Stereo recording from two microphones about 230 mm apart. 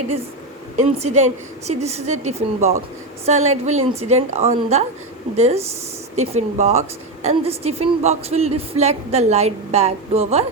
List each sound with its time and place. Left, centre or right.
0.8 s a woman's voice: right